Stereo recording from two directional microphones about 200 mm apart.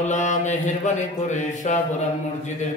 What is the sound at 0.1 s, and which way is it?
Music, 35° left (ahead or behind).